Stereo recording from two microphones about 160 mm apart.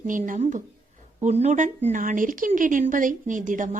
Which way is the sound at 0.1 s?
55° right (ahead or behind).